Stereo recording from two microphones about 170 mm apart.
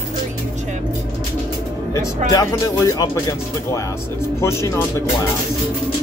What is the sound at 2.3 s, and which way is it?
Speech, 20° left (ahead or behind).